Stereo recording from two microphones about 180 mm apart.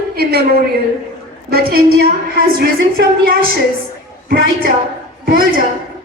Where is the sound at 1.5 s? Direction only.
55° right (ahead or behind).